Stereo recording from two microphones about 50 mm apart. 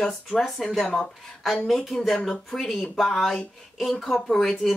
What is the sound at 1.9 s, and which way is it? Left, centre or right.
Speech, centre.